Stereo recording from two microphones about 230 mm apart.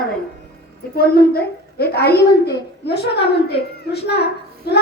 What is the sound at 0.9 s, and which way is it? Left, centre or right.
A woman's voice, left.